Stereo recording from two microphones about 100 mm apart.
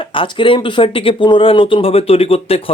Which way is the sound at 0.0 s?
55° left (ahead or behind).